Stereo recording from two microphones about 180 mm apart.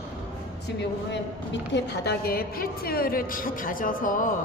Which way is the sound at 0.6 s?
80° left.